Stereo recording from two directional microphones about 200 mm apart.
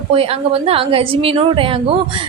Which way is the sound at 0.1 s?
30° right (ahead or behind).